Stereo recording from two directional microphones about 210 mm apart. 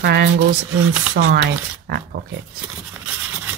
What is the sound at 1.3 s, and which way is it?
Speech, 45° right (ahead or behind).